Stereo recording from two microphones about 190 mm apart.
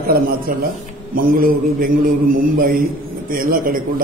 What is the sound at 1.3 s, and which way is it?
Speech, 45° right (ahead or behind).